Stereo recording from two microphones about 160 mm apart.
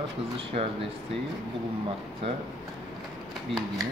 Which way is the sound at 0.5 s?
55° right (ahead or behind).